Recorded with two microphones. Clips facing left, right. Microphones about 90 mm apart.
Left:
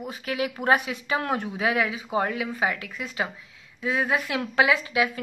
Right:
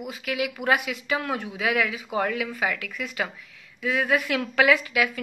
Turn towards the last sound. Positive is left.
turn(degrees=25)  # may be behind; listen again after turning